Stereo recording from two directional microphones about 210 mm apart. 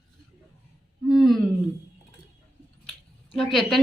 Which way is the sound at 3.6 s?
Centre (ahead or behind).